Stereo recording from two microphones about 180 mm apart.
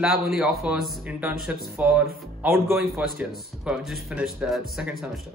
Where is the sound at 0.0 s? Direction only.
Centre (ahead or behind).